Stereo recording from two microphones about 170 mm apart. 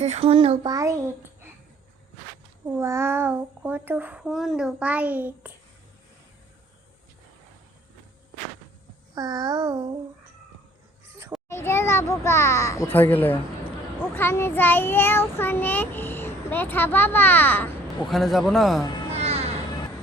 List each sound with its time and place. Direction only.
0.0 s a child's voice: 35° right (ahead or behind)
0.7 s child singing: 20° right (ahead or behind)
2.6 s a child's voice: 15° right (ahead or behind)
9.1 s child singing: 25° right (ahead or behind)
11.4 s child singing: 15° left (ahead or behind)
18.1 s a man's voice: centre (ahead or behind)
19.1 s music: 40° right (ahead or behind)